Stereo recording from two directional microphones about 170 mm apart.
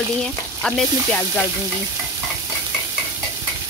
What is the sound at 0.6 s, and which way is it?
Frying, 5° left (ahead or behind).